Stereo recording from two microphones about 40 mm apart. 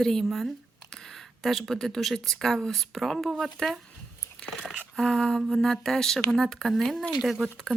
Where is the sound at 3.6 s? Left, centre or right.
Centre.